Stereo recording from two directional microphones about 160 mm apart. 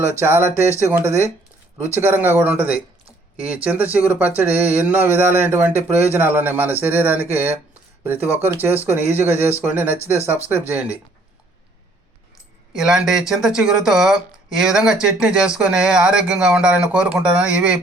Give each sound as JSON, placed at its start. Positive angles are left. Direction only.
{"t": 0.2, "sound": "speech", "side_deg": -15}
{"t": 12.7, "sound": "speech", "side_deg": -5}